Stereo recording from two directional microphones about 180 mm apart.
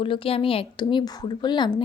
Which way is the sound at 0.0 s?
30° left (ahead or behind).